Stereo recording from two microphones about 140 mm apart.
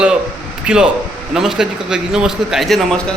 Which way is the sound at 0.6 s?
5° right (ahead or behind).